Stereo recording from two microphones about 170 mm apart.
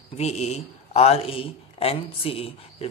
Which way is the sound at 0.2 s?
40° left (ahead or behind).